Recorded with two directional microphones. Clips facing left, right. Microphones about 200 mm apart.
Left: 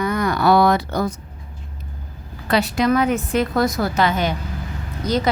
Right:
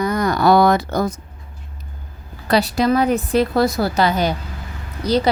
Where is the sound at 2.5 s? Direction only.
35° right (ahead or behind).